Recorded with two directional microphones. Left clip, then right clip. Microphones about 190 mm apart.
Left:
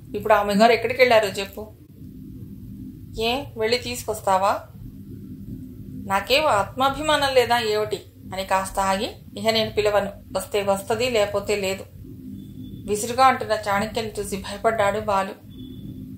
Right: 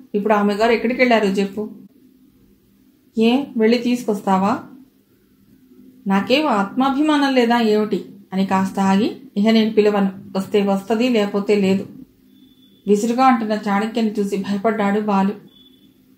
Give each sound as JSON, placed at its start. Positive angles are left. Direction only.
{"t": 0.1, "sound": "a woman's voice", "side_deg": 30}
{"t": 3.2, "sound": "a woman's voice", "side_deg": 30}
{"t": 6.0, "sound": "a woman's voice", "side_deg": 30}
{"t": 12.8, "sound": "a woman's voice", "side_deg": 30}